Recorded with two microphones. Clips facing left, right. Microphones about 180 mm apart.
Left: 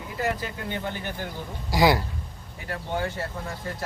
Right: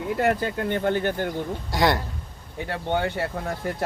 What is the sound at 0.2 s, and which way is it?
Speech, 60° right (ahead or behind).